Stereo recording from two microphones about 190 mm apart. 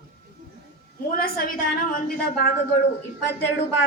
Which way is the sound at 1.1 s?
50° left (ahead or behind).